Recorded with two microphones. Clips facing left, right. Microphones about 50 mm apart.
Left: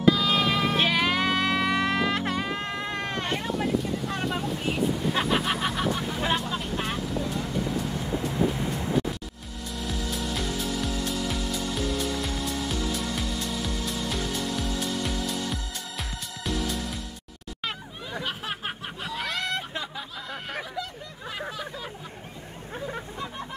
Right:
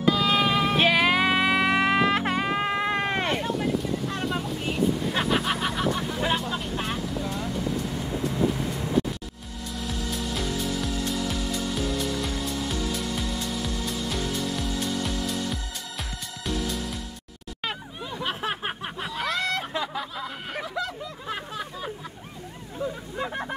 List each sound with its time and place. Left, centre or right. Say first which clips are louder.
0.1 s music: right 2 dB; centre
3.3 s vehicle: right 1 dB; centre
9.8 s music: even; centre
15.2 s music: right 1 dB; centre
18.2 s a sound: right 5 dB; centre
19.0 s a sound: right 2 dB; centre